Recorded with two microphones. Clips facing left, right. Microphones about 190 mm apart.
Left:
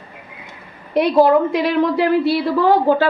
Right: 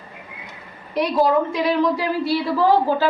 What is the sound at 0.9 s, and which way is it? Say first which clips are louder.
A woman's voice: left 5 dB; 60° left (ahead or behind).